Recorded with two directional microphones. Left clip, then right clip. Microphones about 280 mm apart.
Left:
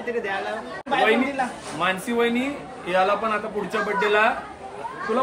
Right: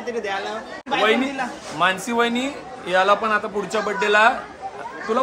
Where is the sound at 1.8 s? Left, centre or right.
Centre.